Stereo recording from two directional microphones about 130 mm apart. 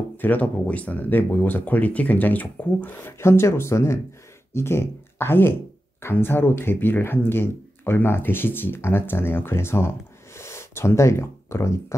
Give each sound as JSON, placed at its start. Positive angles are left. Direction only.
{"t": 0.2, "sound": "speech", "side_deg": 10}